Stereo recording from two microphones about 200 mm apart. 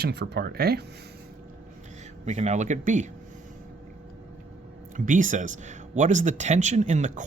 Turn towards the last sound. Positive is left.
turn(degrees=-35)  # may be behind; listen again after turning